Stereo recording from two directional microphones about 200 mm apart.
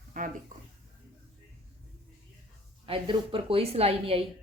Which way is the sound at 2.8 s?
25° right (ahead or behind).